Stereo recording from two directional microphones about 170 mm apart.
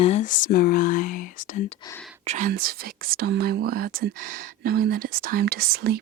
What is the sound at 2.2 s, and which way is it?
Whispering, 45° right (ahead or behind).